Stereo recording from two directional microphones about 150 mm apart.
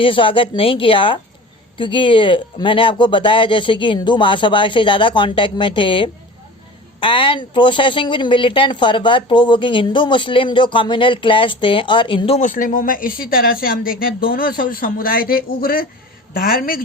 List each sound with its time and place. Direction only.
0.0 s speech: 35° left (ahead or behind)
12.4 s speech: 60° left (ahead or behind)